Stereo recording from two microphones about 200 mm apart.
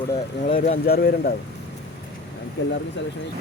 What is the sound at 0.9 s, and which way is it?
Speech, 50° left (ahead or behind).